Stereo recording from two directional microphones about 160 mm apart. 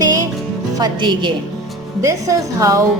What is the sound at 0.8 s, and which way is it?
A woman's voice, 30° right (ahead or behind).